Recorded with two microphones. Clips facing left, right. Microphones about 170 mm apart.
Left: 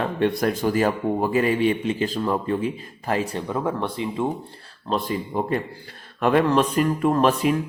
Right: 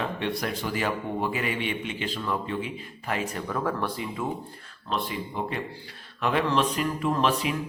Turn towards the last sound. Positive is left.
turn(degrees=45)  # may be behind; listen again after turning